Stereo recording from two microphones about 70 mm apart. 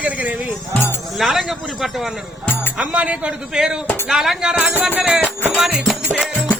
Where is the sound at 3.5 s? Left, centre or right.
Centre.